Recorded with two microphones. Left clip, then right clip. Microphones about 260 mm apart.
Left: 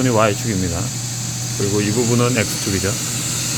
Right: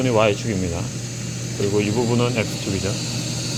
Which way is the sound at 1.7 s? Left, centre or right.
Left.